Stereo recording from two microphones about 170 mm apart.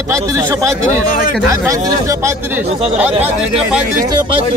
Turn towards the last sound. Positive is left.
turn(degrees=-5)  # may be behind; listen again after turning